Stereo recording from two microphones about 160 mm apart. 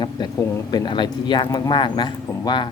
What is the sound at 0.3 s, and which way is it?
Speech, 20° left (ahead or behind).